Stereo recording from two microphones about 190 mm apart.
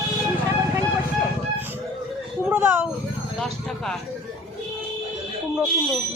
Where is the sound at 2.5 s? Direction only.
5° right (ahead or behind).